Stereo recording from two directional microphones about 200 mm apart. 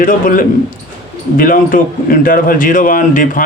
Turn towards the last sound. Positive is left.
turn(degrees=40)  # may be behind; listen again after turning